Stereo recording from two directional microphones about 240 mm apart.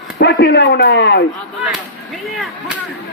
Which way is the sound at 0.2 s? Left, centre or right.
Left.